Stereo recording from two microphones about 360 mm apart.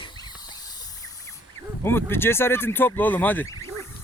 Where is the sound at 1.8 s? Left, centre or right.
Centre.